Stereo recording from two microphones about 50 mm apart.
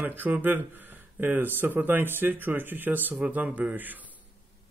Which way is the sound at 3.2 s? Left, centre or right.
Right.